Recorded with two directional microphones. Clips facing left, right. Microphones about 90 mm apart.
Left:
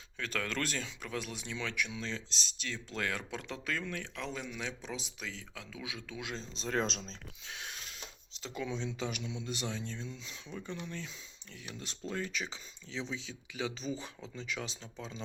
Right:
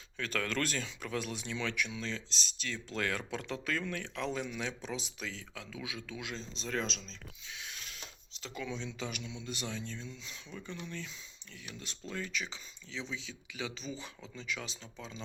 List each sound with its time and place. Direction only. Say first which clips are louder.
0.2 s speech: right 1 dB; 10° left (ahead or behind); by 6.8 s 30° left (ahead or behind)
7.1 s speech: left 2 dB; 55° left (ahead or behind)
7.8 s speech: left 1 dB; 25° left (ahead or behind)